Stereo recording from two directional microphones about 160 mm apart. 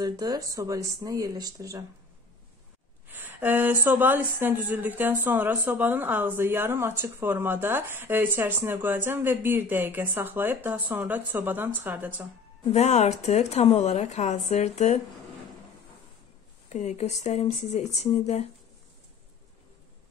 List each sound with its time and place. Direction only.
0.0 s speech: 25° right (ahead or behind)
3.1 s speech: 10° right (ahead or behind)
12.7 s speech: 45° left (ahead or behind)
16.6 s speech: 45° left (ahead or behind)